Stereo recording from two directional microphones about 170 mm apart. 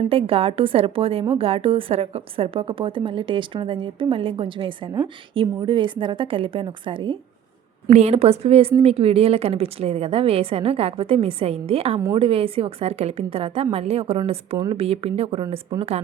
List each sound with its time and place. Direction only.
0.1 s a woman's voice: 35° right (ahead or behind)
7.9 s a woman's voice: 40° right (ahead or behind)